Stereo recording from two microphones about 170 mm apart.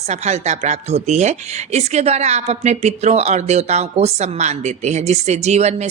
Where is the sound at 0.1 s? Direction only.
40° right (ahead or behind).